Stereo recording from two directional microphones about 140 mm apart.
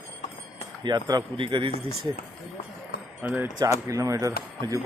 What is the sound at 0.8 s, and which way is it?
Speech, 30° right (ahead or behind).